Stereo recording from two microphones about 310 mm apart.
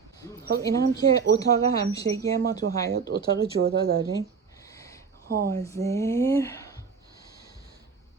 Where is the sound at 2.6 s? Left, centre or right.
Right.